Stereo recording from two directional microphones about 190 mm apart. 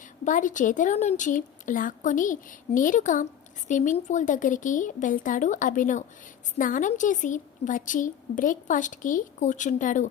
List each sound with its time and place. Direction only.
0.3 s a woman's voice: 40° left (ahead or behind)